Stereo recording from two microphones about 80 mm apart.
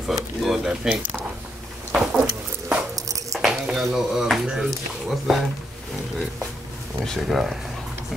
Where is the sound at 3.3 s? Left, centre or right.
Centre.